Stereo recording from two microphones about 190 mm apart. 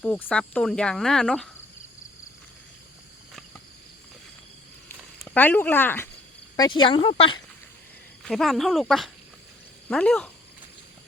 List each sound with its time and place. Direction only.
0.0 s speech: 5° left (ahead or behind)
5.2 s speech: 10° left (ahead or behind)
6.6 s speech: 25° left (ahead or behind)
8.2 s speech: centre (ahead or behind)